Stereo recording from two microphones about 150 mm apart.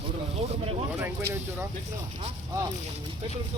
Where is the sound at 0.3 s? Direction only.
40° right (ahead or behind).